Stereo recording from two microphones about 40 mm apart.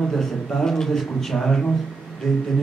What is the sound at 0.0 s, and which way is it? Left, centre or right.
A man's voice, centre.